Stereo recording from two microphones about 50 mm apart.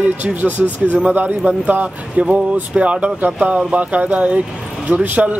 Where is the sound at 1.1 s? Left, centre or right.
Right.